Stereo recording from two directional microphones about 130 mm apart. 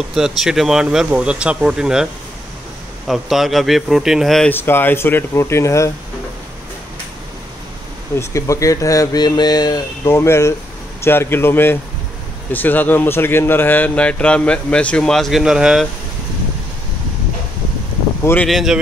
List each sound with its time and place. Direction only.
0.4 s speech: centre (ahead or behind)
3.1 s speech: centre (ahead or behind)
4.5 s a man's voice: 15° left (ahead or behind)
8.2 s speech: 25° left (ahead or behind)
10.0 s a man's voice: 20° left (ahead or behind); by 15.9 s 5° right (ahead or behind)
18.2 s speech: 15° left (ahead or behind)
18.5 s speech: centre (ahead or behind)